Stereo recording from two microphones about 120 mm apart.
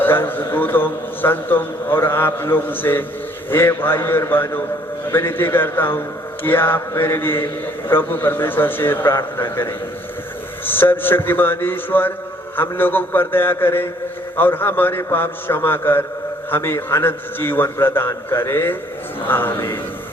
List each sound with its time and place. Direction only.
0.0 s a man's voice: 15° left (ahead or behind)